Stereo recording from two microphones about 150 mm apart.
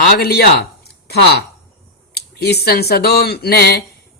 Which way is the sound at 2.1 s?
90° left.